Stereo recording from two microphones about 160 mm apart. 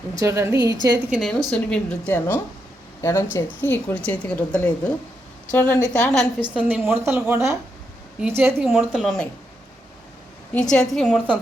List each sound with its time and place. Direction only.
0.2 s a woman's voice: 15° right (ahead or behind)
1.1 s a woman's voice: centre (ahead or behind)
9.0 s a woman's voice: 5° left (ahead or behind)
10.5 s a woman's voice: 5° left (ahead or behind)